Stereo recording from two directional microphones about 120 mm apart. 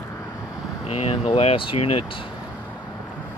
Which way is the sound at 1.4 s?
50° left (ahead or behind).